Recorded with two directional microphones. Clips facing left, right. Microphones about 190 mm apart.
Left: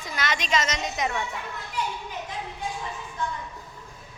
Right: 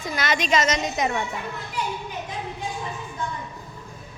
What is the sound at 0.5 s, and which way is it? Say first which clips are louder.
Speech: right 5 dB; 45° right (ahead or behind).